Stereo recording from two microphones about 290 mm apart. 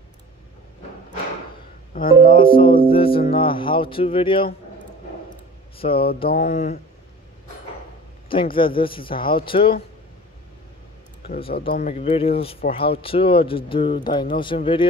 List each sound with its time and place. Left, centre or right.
2.0 s speech: left
2.3 s speech: centre
5.8 s speech: centre
8.5 s speech: centre
11.7 s speech: left